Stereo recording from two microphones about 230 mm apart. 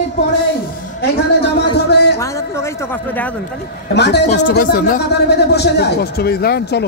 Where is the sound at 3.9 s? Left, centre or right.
Left.